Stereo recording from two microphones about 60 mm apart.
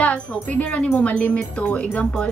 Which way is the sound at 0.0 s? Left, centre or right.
Left.